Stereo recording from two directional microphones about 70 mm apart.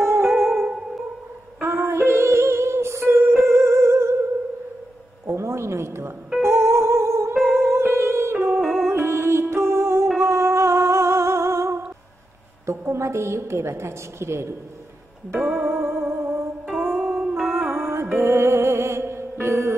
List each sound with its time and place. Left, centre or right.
0.0 s music: right
0.6 s music: centre
1.6 s music: right
5.2 s a sound: right
6.4 s music: right
8.5 s music: centre
8.8 s music: right
12.6 s a woman's voice: right
15.6 s music: right
16.9 s music: centre
17.6 s music: right